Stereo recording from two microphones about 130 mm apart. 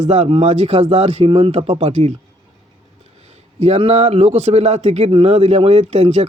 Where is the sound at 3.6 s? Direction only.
50° right (ahead or behind).